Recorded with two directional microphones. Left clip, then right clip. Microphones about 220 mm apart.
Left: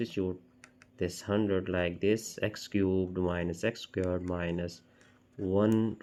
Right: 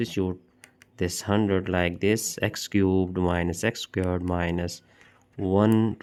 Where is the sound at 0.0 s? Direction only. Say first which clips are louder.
Right 5 dB; 45° right (ahead or behind).